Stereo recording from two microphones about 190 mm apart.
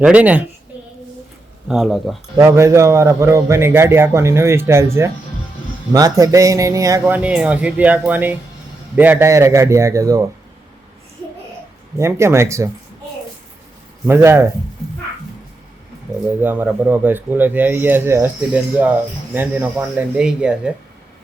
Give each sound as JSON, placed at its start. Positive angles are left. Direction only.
{"t": 0.0, "sound": "speech", "side_deg": -5}
{"t": 1.6, "sound": "speech", "side_deg": -5}
{"t": 2.3, "sound": "speech", "side_deg": -15}
{"t": 11.9, "sound": "speech", "side_deg": -15}
{"t": 14.1, "sound": "speech", "side_deg": -15}
{"t": 16.2, "sound": "speech", "side_deg": -10}